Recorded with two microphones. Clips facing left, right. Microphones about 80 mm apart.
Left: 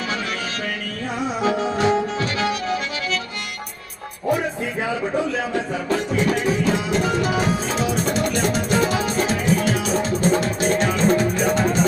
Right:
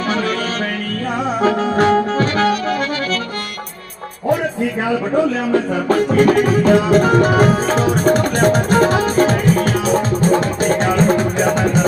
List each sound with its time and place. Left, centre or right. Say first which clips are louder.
1.4 s music: right 5 dB; right
5.5 s music: right 7 dB; right